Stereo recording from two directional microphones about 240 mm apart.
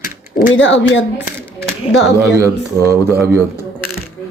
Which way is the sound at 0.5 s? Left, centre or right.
Left.